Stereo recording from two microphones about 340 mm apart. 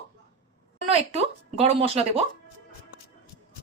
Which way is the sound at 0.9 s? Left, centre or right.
Centre.